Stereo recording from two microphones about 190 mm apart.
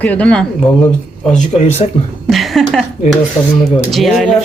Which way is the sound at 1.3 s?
35° left (ahead or behind).